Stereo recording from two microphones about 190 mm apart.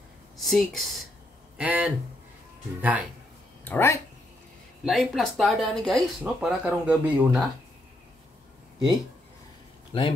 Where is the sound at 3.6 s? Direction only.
10° left (ahead or behind).